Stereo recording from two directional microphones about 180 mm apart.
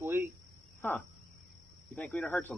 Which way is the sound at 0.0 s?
10° right (ahead or behind).